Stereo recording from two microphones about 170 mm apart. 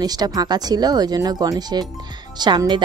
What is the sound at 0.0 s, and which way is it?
Speech, 25° right (ahead or behind).